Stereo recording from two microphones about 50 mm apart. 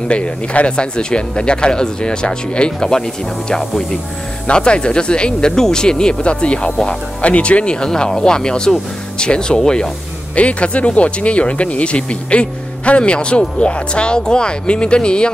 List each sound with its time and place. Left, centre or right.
0.1 s speech: left